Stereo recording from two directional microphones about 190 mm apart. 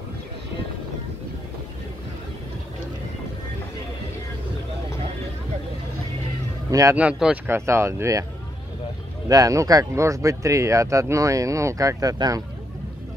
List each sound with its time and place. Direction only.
6.7 s speech: 15° right (ahead or behind)
9.3 s speech: 15° right (ahead or behind)